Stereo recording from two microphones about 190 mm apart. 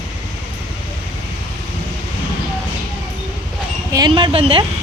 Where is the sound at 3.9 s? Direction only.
20° right (ahead or behind).